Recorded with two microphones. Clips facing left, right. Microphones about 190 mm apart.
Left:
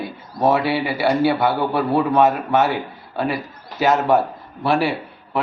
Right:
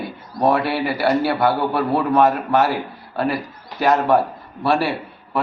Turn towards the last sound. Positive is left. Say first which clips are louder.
# even
turn(degrees=0)  # may be behind; listen again after turning